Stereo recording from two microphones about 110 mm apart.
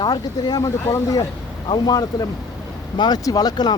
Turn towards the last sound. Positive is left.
turn(degrees=40)  # may be behind; listen again after turning